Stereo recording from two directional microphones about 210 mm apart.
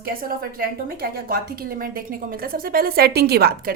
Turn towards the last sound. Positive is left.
turn(degrees=-45)  # may be behind; listen again after turning